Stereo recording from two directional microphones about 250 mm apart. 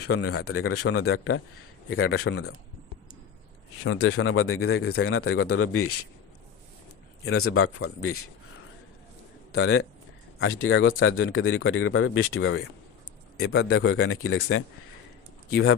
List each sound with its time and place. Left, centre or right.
0.1 s speech: left
3.8 s speech: left
7.3 s speech: left
9.5 s speech: left
13.7 s speech: left